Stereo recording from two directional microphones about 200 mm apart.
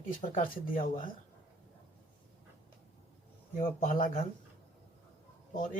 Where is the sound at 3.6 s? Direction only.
40° left (ahead or behind).